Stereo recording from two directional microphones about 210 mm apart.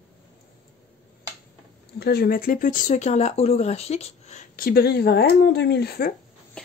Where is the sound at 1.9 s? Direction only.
50° left (ahead or behind).